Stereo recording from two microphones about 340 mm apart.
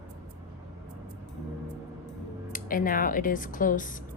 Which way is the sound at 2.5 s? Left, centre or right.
Left.